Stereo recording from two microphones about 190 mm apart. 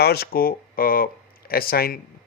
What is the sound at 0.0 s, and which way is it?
Speech, 55° left (ahead or behind).